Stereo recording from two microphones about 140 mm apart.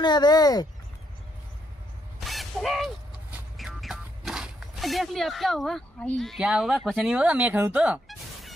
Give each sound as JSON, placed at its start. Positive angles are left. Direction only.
{"t": 0.0, "sound": "speech", "side_deg": 30}
{"t": 2.1, "sound": "a sound", "side_deg": 0}
{"t": 3.5, "sound": "speech", "side_deg": 0}
{"t": 8.1, "sound": "music", "side_deg": 0}